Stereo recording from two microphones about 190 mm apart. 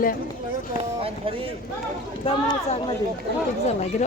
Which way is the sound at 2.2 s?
30° left (ahead or behind).